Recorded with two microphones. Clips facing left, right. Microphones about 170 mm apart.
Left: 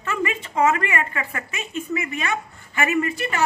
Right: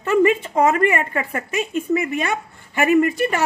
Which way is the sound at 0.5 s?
40° right (ahead or behind).